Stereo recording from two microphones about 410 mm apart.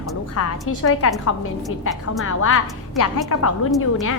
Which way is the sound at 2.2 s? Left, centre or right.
Left.